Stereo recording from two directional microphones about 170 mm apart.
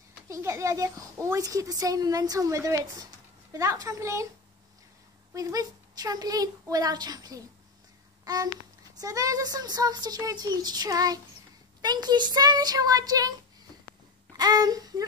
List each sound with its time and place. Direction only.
0.3 s a woman's voice: 15° right (ahead or behind)
5.3 s a woman's voice: 20° right (ahead or behind)
9.0 s a woman's voice: 20° right (ahead or behind)
14.3 s a sound: 25° right (ahead or behind)